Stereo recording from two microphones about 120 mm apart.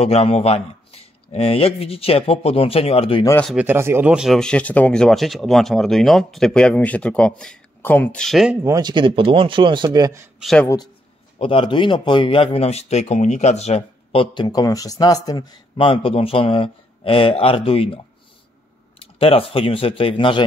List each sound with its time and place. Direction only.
0.0 s speech: 55° left (ahead or behind)
3.5 s speech: 20° right (ahead or behind)
4.1 s speech: 5° right (ahead or behind)
4.4 s speech: 10° left (ahead or behind)
8.6 s speech: 30° right (ahead or behind)
8.9 s speech: 45° right (ahead or behind)
9.9 s speech: 25° right (ahead or behind)
10.4 s speech: 5° left (ahead or behind)
11.3 s speech: 45° left (ahead or behind)
15.9 s speech: 50° left (ahead or behind)